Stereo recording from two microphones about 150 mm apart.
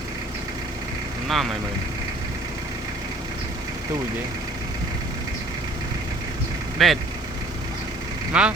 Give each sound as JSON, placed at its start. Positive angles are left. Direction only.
{"t": 1.3, "sound": "speech", "side_deg": 0}
{"t": 6.7, "sound": "speech", "side_deg": 0}
{"t": 8.3, "sound": "speech", "side_deg": -10}